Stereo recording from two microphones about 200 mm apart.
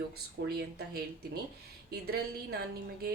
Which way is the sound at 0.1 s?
50° right (ahead or behind).